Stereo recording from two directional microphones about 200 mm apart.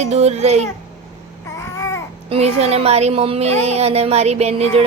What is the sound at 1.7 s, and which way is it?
Babbling, 15° left (ahead or behind).